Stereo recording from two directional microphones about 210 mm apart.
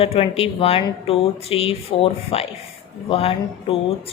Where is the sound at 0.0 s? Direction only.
30° left (ahead or behind).